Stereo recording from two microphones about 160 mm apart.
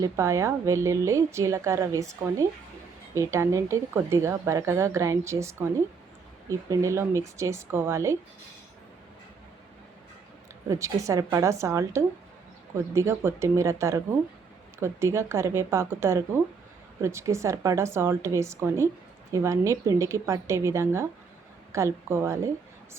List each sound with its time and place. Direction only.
0.0 s a woman's voice: 20° right (ahead or behind)
10.7 s a woman's voice: 20° right (ahead or behind)